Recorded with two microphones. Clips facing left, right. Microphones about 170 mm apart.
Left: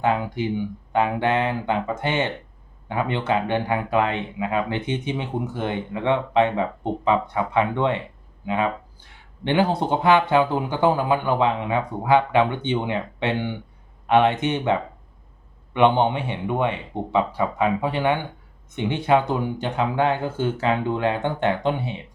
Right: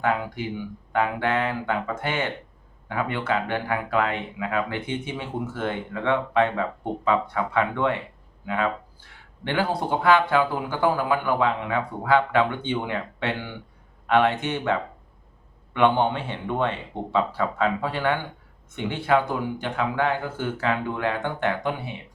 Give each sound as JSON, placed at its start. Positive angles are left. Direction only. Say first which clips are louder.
{"t": 0.0, "sound": "speech", "louder": "left 3 dB", "side_deg": 20}